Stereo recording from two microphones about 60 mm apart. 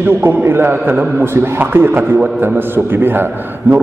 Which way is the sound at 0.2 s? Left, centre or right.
Right.